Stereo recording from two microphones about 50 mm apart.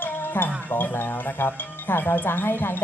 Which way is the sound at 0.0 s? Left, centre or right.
Left.